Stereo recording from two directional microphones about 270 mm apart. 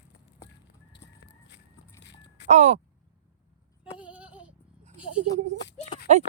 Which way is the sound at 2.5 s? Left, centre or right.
Right.